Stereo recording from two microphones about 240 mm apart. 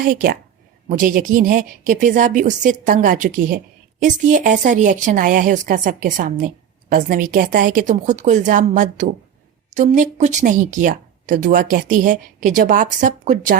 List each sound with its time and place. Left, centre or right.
0.0 s speech: right